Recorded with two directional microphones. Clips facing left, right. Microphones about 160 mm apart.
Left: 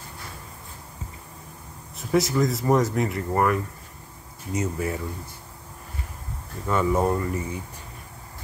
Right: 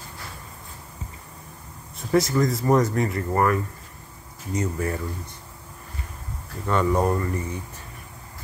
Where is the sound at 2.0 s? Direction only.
Centre (ahead or behind).